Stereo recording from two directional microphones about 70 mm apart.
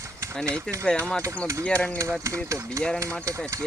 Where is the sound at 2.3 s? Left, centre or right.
Right.